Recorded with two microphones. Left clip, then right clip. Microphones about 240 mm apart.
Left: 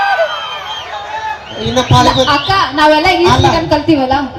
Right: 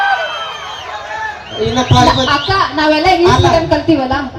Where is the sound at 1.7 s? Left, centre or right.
Left.